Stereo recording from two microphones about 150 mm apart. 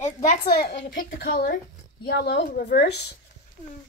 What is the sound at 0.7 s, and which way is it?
A woman's voice, 90° left.